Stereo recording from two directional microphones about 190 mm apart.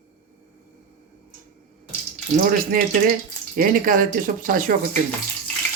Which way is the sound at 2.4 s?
45° right (ahead or behind).